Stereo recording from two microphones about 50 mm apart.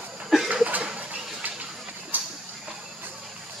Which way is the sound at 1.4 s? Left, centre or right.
Right.